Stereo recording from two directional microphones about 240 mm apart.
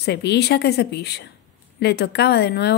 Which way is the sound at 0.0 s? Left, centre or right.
Left.